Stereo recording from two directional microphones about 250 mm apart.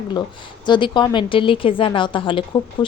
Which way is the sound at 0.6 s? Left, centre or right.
Centre.